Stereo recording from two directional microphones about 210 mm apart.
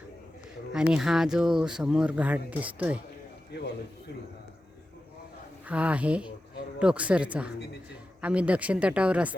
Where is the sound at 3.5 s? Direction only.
55° left (ahead or behind).